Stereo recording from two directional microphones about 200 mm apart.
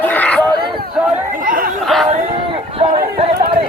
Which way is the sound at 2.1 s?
30° right (ahead or behind).